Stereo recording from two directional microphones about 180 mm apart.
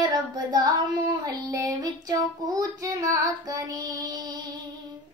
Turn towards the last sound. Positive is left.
turn(degrees=-20)  # may be behind; listen again after turning